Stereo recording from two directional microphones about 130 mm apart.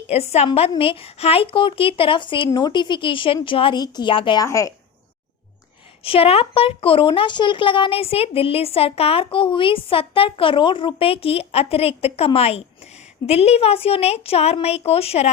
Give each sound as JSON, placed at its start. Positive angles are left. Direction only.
{"t": 0.1, "sound": "a woman's voice", "side_deg": 55}
{"t": 4.4, "sound": "speech", "side_deg": 25}
{"t": 6.0, "sound": "a woman's voice", "side_deg": 45}